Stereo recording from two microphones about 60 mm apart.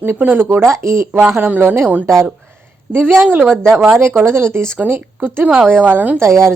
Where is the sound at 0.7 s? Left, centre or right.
Right.